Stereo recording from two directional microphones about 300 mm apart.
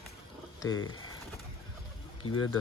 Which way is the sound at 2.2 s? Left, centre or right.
Left.